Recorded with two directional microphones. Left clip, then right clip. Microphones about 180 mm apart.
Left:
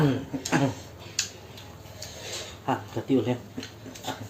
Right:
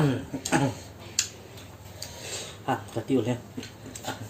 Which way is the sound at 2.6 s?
15° right (ahead or behind).